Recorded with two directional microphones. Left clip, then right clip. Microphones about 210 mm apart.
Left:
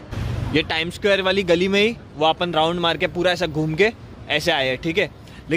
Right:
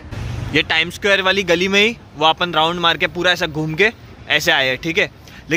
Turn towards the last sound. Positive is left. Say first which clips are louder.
# right 4 dB
turn(degrees=0)  # may be behind; listen again after turning